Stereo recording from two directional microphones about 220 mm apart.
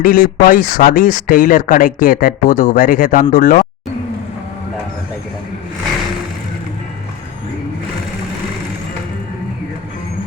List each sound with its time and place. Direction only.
0.0 s speech: 40° left (ahead or behind)